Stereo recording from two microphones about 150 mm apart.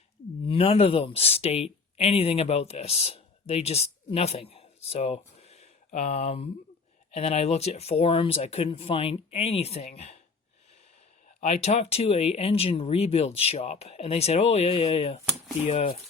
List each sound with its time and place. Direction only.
0.4 s speech: 40° left (ahead or behind)
11.3 s speech: 45° left (ahead or behind)